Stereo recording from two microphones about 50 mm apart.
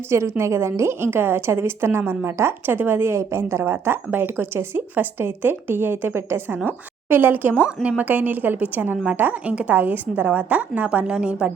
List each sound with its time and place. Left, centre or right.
0.1 s a woman's voice: right
3.6 s speech: right
6.7 s a woman's voice: right
7.6 s a woman's voice: right
8.0 s a woman's voice: right